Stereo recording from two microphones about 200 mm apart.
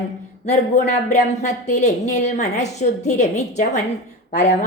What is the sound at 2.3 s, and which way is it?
Speech, 35° left (ahead or behind).